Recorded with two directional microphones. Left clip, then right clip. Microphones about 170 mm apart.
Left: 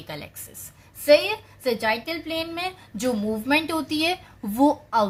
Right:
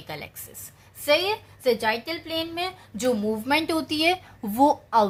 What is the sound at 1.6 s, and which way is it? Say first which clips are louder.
A woman's voice: right 1 dB; 20° right (ahead or behind).